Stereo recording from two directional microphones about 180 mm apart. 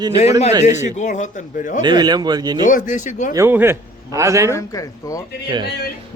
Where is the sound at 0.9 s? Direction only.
45° left (ahead or behind).